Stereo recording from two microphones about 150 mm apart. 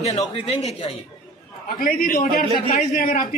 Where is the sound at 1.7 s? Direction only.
70° left (ahead or behind).